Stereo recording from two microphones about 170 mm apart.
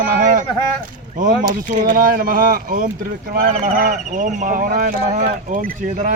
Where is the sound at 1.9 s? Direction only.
55° right (ahead or behind).